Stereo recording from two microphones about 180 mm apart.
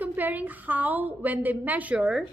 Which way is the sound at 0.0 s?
10° right (ahead or behind).